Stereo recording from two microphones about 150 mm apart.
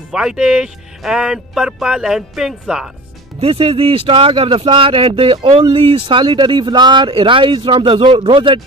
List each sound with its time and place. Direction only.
0.1 s speech: 5° right (ahead or behind)
3.3 s speech: 40° right (ahead or behind)